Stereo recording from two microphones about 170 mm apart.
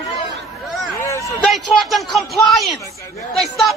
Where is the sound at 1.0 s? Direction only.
15° left (ahead or behind).